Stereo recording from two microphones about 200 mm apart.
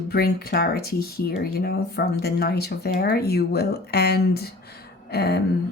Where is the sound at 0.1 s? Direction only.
50° left (ahead or behind).